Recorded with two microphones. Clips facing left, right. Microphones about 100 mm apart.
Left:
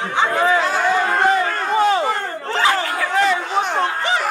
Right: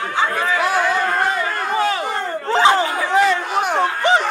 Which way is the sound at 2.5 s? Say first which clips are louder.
Right 4 dB; 20° right (ahead or behind).